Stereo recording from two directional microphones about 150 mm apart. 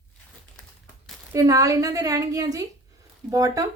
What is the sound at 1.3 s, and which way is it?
A woman's voice, 25° right (ahead or behind).